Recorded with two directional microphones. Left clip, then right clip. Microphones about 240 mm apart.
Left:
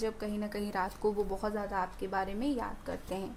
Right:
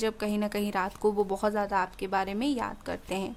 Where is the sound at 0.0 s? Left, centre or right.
Right.